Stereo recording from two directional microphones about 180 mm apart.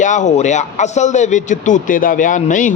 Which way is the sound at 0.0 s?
45° left (ahead or behind).